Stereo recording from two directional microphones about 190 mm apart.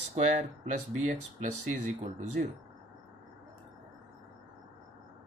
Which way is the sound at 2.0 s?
35° right (ahead or behind).